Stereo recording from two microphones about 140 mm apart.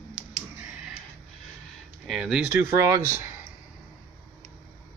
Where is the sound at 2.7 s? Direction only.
20° right (ahead or behind).